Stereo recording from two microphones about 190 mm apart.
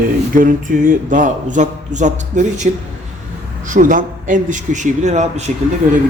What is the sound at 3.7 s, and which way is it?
A man's voice, 45° right (ahead or behind).